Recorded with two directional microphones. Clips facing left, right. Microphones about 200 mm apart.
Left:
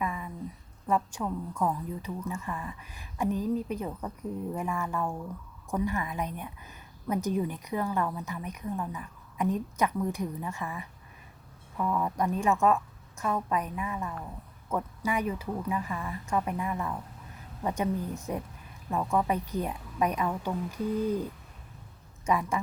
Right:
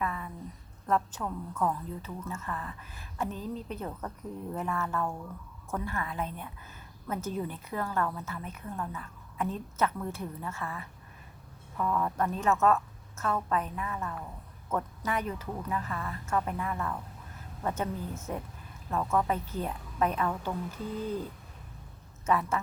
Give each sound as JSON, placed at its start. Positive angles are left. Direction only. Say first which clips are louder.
{"t": 0.0, "sound": "a sound", "louder": "left 1 dB", "side_deg": 15}
{"t": 0.9, "sound": "a woman's voice", "louder": "left 1 dB", "side_deg": 10}
{"t": 22.3, "sound": "a woman's voice", "louder": "even", "side_deg": 15}